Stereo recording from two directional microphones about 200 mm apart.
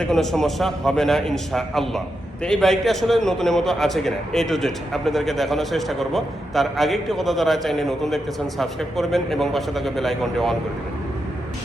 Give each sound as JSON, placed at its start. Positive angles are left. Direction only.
{"t": 0.0, "sound": "a man's voice", "side_deg": 0}